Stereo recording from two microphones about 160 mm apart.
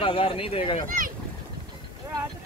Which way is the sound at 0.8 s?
60° right (ahead or behind).